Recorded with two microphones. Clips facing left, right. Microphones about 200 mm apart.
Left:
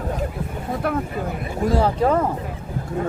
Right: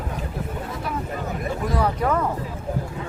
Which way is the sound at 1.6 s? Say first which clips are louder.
Left 5 dB; 30° left (ahead or behind).